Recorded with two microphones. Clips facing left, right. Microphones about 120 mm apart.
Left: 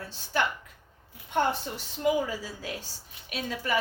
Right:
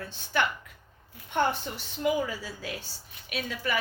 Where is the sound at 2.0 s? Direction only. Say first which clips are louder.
Left 1 dB; 30° left (ahead or behind).